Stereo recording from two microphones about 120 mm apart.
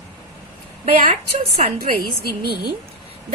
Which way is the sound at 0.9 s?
85° right.